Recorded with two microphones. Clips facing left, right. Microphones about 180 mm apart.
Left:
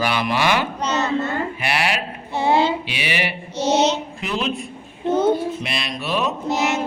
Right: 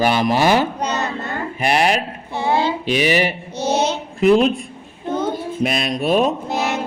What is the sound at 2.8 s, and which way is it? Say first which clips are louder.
Mantra: right 8 dB; 45° right (ahead or behind).